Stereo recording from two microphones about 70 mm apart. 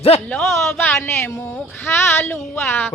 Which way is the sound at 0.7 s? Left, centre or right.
Left.